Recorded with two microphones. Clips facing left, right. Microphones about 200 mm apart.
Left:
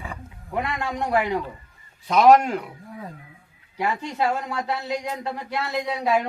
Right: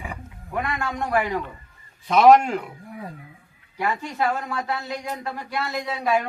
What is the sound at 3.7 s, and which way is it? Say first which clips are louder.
A woman's voice: even; 25° left (ahead or behind).